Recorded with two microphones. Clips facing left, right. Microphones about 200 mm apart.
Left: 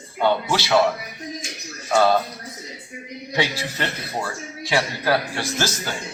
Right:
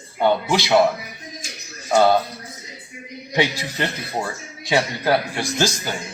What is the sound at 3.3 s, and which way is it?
A man's voice, 20° right (ahead or behind).